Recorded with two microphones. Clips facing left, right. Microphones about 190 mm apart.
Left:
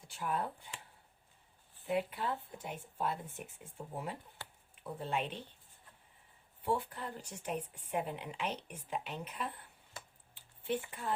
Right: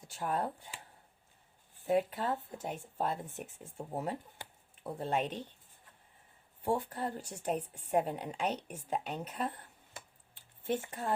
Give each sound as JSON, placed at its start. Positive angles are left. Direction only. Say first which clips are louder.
{"t": 0.1, "sound": "speech", "louder": "right 3 dB", "side_deg": -40}
{"t": 1.9, "sound": "speech", "louder": "right 4 dB", "side_deg": -40}
{"t": 6.7, "sound": "speech", "louder": "right 3 dB", "side_deg": -40}
{"t": 10.6, "sound": "speech", "louder": "right 2 dB", "side_deg": -45}